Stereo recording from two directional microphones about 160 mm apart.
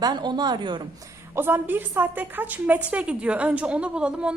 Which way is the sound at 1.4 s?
15° right (ahead or behind).